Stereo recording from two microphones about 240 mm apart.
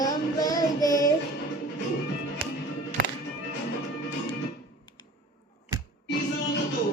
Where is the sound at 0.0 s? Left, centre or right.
Centre.